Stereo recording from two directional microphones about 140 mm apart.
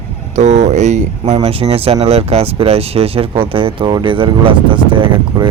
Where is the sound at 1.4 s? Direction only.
45° right (ahead or behind).